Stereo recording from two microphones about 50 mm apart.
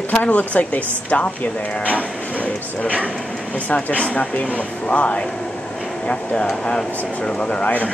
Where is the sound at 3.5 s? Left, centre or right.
Left.